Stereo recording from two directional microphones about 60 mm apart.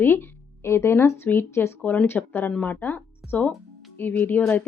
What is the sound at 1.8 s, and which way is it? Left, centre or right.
A woman's voice, left.